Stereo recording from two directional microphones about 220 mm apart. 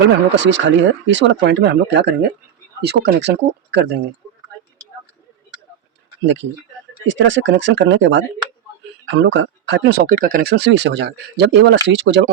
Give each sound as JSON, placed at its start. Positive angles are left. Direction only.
{"t": 0.0, "sound": "speech", "side_deg": -55}
{"t": 6.2, "sound": "speech", "side_deg": -55}